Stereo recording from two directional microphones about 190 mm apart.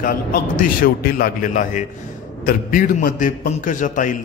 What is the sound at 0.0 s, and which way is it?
A man's voice, 50° left (ahead or behind).